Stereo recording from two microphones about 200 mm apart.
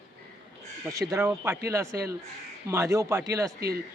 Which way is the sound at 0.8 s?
15° right (ahead or behind).